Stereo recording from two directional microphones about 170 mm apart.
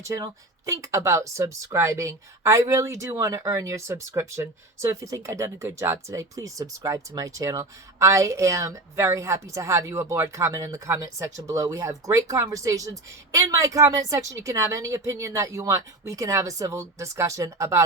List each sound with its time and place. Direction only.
0.1 s speech: 20° right (ahead or behind)